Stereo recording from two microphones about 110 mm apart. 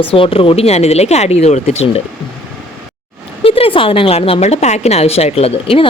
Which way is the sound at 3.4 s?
60° left (ahead or behind).